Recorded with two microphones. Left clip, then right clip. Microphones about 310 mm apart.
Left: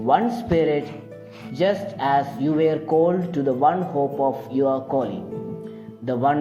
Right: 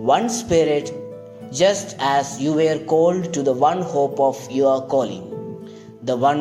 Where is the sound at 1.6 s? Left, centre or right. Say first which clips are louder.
Right 4 dB; right.